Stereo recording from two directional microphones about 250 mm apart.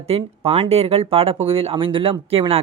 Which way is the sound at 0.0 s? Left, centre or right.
Right.